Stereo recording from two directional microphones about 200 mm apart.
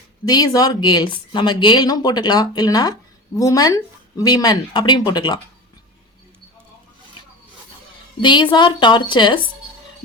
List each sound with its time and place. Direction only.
0.3 s speech: 20° left (ahead or behind)
8.2 s speech: 25° left (ahead or behind)